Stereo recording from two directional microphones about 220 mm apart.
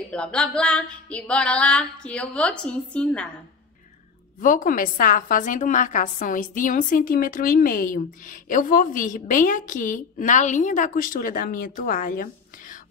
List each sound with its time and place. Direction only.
0.1 s music: 5° left (ahead or behind)
4.4 s a woman's voice: 40° left (ahead or behind)